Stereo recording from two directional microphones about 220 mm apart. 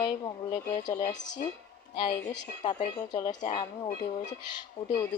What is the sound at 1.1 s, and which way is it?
Speech, 55° left (ahead or behind).